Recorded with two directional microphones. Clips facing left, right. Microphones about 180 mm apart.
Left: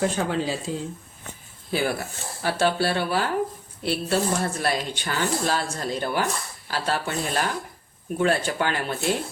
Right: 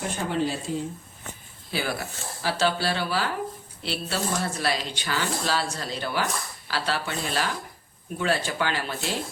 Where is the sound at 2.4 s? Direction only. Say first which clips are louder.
Left 3 dB; 55° left (ahead or behind).